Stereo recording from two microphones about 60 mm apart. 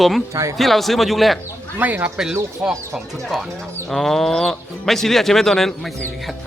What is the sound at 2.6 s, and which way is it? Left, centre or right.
Speech, centre.